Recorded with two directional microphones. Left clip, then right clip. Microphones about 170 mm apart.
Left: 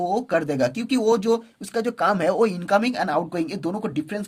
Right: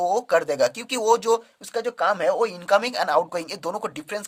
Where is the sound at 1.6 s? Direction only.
15° right (ahead or behind).